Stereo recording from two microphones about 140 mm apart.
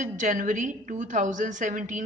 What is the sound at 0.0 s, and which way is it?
A woman's voice, 65° right (ahead or behind).